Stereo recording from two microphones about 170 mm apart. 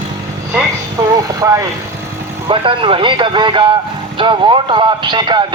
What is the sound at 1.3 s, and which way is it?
Speech, 20° right (ahead or behind).